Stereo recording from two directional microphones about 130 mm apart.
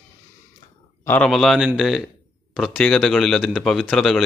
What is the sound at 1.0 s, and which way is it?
Speech, 10° left (ahead or behind).